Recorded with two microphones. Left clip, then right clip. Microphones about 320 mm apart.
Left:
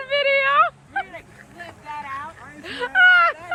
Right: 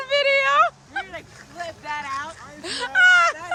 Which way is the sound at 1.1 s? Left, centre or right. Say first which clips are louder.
Right 4 dB; centre.